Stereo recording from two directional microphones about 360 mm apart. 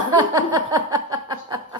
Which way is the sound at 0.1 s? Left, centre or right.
Centre.